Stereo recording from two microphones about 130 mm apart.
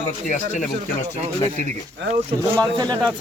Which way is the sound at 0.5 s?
70° left (ahead or behind).